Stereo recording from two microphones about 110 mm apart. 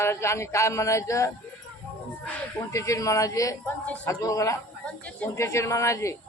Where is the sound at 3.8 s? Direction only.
15° left (ahead or behind).